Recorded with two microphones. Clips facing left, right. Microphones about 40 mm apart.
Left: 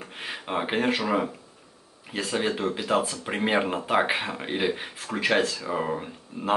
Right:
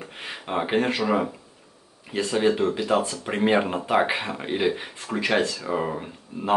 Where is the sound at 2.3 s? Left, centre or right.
Centre.